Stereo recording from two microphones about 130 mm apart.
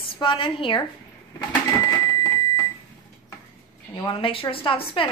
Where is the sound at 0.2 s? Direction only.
40° left (ahead or behind).